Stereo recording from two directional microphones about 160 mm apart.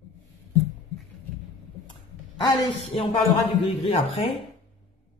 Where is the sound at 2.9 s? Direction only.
40° left (ahead or behind).